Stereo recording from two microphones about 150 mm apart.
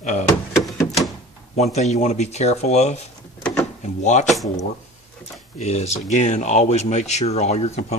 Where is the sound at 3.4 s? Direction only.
5° left (ahead or behind).